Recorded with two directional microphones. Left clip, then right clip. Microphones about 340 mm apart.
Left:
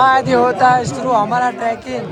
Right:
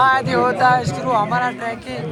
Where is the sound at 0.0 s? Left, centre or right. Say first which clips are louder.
Left 4 dB; centre.